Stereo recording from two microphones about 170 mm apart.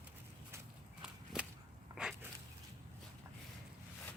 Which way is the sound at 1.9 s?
5° right (ahead or behind).